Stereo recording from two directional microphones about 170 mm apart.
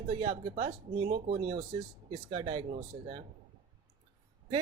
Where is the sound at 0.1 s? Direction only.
25° right (ahead or behind).